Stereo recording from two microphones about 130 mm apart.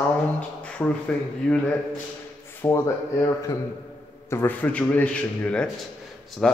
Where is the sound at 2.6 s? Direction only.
25° left (ahead or behind).